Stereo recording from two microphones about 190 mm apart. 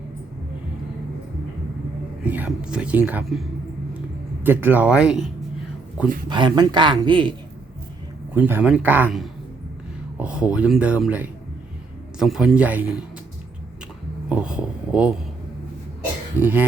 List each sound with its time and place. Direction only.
2.2 s speech: 10° right (ahead or behind)
4.4 s speech: 10° right (ahead or behind)
6.2 s speech: 25° right (ahead or behind)
8.3 s speech: 10° right (ahead or behind)
14.3 s speech: 5° right (ahead or behind)
16.4 s speech: 10° right (ahead or behind)